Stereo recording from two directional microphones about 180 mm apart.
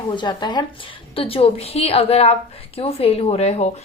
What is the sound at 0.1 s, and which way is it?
A woman's voice, 25° left (ahead or behind).